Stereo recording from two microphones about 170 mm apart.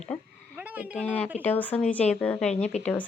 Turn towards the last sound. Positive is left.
turn(degrees=5)  # may be behind; listen again after turning